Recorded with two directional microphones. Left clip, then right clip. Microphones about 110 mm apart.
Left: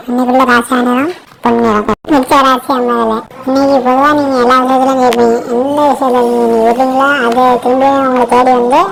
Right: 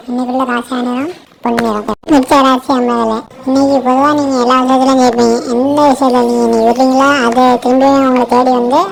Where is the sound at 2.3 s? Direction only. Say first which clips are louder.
Left 2 dB; 35° right (ahead or behind).